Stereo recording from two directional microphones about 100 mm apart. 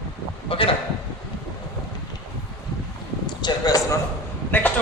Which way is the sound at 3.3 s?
45° left (ahead or behind).